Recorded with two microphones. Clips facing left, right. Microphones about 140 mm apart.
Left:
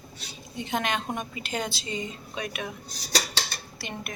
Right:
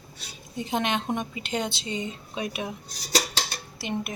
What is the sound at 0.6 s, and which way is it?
A woman's voice, 30° right (ahead or behind).